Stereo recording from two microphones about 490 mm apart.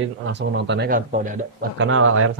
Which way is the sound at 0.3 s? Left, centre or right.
Right.